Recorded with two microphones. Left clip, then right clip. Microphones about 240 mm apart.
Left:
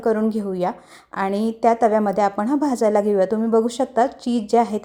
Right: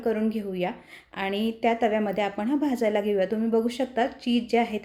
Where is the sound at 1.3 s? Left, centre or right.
Centre.